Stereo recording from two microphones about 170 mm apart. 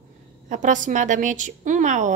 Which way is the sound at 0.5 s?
50° right (ahead or behind).